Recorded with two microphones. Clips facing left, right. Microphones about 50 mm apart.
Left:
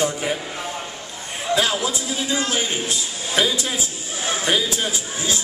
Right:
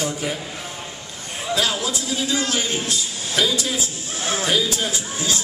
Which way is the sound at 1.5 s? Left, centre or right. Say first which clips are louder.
Left 2 dB; centre.